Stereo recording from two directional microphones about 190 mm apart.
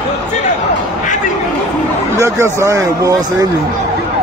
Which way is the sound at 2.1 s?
15° right (ahead or behind).